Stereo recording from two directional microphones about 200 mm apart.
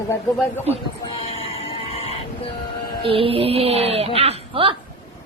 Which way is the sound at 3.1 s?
30° right (ahead or behind).